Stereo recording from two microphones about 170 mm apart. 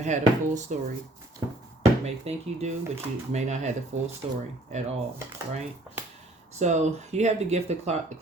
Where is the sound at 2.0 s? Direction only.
40° right (ahead or behind).